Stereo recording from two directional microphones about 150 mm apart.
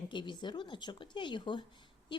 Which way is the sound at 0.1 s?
30° left (ahead or behind).